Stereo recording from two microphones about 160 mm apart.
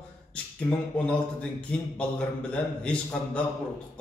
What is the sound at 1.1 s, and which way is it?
A man's voice, 5° left (ahead or behind).